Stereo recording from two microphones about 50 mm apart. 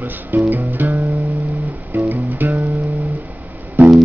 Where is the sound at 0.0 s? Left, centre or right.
Right.